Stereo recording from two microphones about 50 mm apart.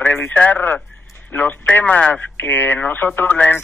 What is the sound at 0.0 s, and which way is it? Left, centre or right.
Speech, left.